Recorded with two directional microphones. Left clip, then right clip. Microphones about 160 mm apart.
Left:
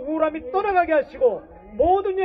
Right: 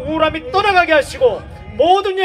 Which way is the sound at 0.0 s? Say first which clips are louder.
Right 6 dB; 20° right (ahead or behind).